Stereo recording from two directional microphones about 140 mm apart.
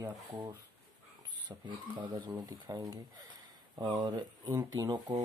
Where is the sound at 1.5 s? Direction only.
20° right (ahead or behind).